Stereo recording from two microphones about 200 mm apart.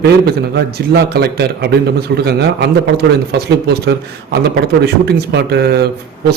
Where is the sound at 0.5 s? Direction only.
55° right (ahead or behind).